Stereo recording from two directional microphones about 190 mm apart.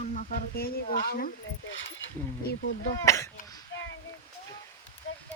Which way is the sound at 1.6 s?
85° left.